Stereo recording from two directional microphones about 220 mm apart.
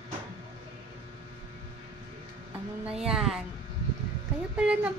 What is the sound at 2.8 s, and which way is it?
Speech, 5° right (ahead or behind).